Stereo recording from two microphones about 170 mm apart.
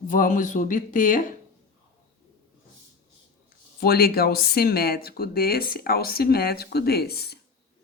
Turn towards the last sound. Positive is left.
turn(degrees=70)  # may be behind; listen again after turning